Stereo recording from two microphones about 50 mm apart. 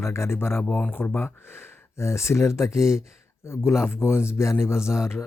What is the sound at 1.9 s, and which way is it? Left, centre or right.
Speech, left.